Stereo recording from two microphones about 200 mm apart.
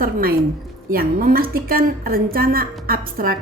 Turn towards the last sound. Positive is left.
turn(degrees=-50)  # may be behind; listen again after turning